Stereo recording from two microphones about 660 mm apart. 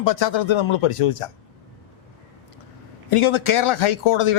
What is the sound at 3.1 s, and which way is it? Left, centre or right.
A man's voice, left.